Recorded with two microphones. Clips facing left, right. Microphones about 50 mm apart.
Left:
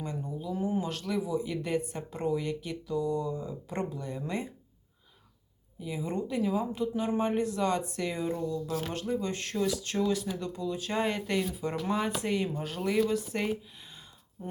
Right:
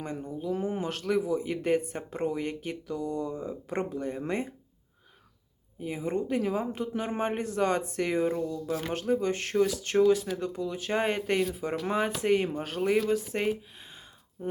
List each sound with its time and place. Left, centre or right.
0.0 s a sound: right
0.3 s speech: right
5.8 s speech: right
10.6 s speech: right
12.2 s speech: right
13.1 s speech: right